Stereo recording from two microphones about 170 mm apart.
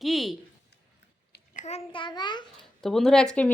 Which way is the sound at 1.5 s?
40° left (ahead or behind).